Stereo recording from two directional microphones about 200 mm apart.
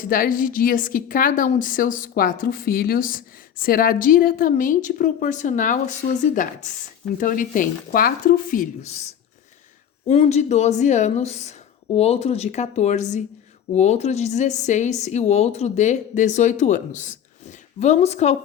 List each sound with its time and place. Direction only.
0.0 s a woman's voice: 45° left (ahead or behind)
10.1 s speech: 35° left (ahead or behind)